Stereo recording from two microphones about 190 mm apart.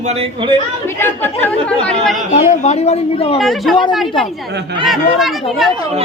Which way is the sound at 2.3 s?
40° left (ahead or behind).